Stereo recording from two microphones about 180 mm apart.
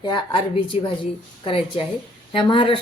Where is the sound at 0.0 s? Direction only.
25° left (ahead or behind).